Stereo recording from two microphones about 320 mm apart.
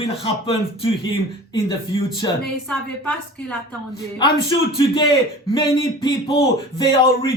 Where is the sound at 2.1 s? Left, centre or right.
Centre.